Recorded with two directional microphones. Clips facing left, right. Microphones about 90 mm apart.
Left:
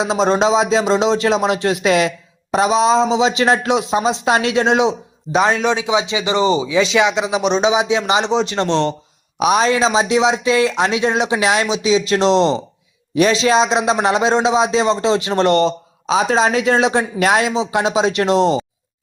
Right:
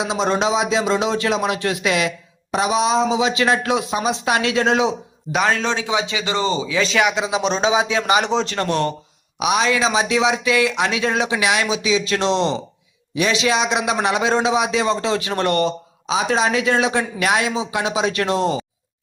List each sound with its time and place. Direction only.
0.0 s a man's voice: 35° left (ahead or behind)
9.4 s a man's voice: 40° left (ahead or behind)
16.0 s speech: 40° left (ahead or behind)